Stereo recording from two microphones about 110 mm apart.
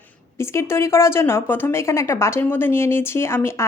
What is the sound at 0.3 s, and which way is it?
Speech, 25° left (ahead or behind).